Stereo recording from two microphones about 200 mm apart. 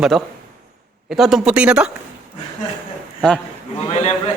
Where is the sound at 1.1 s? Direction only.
Centre (ahead or behind).